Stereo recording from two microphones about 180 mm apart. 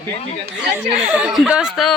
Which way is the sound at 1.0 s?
5° right (ahead or behind).